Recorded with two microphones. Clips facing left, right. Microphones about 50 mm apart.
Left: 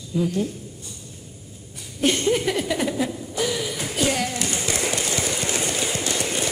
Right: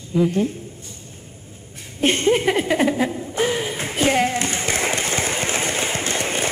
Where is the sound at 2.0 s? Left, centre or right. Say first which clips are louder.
Right 3 dB; right.